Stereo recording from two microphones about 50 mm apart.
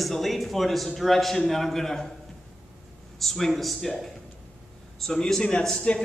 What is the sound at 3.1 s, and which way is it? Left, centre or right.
Speech, centre.